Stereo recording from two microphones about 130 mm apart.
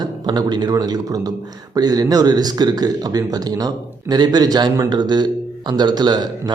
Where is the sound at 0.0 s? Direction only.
30° right (ahead or behind).